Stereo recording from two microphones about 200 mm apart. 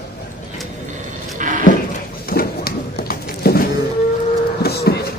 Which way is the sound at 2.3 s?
50° left (ahead or behind).